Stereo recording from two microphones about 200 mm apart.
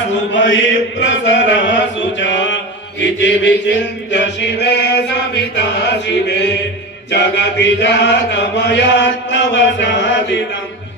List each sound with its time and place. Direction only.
0.3 s chant: 65° left (ahead or behind)